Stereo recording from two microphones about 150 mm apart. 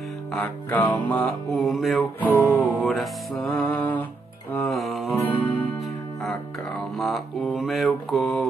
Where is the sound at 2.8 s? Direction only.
Centre (ahead or behind).